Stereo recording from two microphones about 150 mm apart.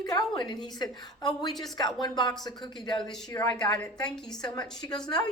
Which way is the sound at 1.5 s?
Centre (ahead or behind).